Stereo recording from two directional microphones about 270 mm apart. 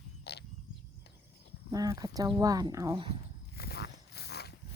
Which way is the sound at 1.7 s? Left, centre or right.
Centre.